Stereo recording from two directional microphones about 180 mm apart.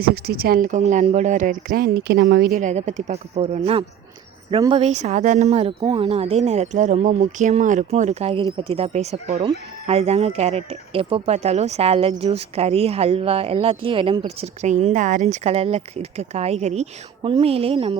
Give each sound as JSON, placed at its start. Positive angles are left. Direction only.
{"t": 0.0, "sound": "speech", "side_deg": -60}
{"t": 2.6, "sound": "speech", "side_deg": -40}